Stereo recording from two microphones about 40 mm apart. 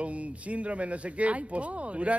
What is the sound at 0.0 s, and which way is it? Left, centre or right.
Speech, right.